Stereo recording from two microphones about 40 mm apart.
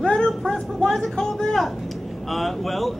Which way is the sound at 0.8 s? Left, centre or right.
Centre.